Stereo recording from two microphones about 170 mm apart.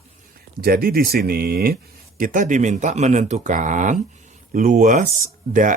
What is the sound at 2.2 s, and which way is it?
Speech, 50° right (ahead or behind).